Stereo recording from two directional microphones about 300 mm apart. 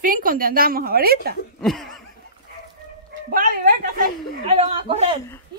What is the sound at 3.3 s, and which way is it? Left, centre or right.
A woman's voice, right.